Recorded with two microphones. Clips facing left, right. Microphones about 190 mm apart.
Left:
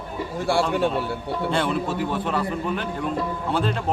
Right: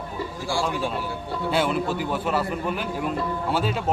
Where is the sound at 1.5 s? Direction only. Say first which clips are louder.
Right 2 dB; centre (ahead or behind).